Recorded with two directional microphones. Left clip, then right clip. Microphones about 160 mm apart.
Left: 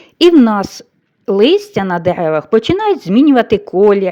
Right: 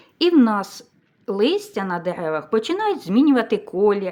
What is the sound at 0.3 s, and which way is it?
A woman's voice, 35° left (ahead or behind).